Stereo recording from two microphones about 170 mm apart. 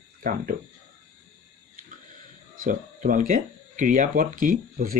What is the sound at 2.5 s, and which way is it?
Speech, 55° right (ahead or behind).